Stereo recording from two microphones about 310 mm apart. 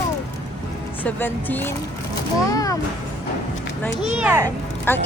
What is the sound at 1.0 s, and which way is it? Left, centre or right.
Speech, centre.